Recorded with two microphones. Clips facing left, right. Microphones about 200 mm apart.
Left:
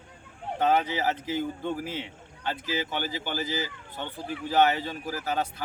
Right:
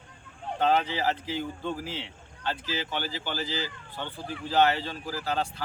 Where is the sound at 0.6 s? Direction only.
15° left (ahead or behind).